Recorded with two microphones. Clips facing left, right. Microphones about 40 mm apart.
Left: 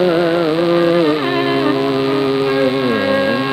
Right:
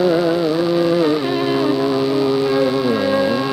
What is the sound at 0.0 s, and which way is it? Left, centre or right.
Carnatic music, left.